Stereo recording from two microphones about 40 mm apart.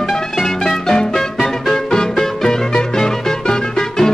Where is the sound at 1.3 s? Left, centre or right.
Centre.